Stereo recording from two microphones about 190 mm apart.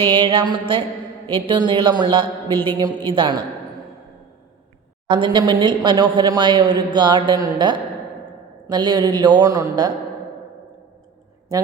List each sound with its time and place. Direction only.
0.0 s a woman's voice: 25° right (ahead or behind)
5.0 s a woman's voice: 25° right (ahead or behind)